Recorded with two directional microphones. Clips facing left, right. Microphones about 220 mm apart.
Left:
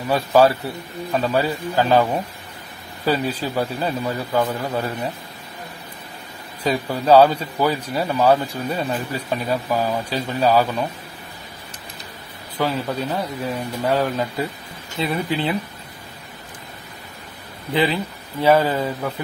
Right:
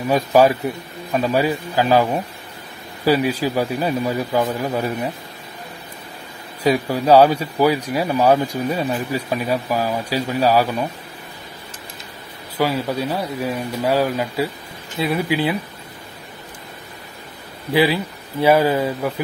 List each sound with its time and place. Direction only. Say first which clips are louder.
0.1 s speech: right 1 dB; 15° right (ahead or behind)
6.6 s speech: right 4 dB; 10° right (ahead or behind)
12.5 s speech: right 2 dB; 10° right (ahead or behind)
17.7 s speech: right 3 dB; 10° right (ahead or behind)